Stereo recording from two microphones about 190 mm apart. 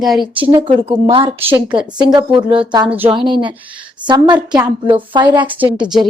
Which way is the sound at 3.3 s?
25° right (ahead or behind).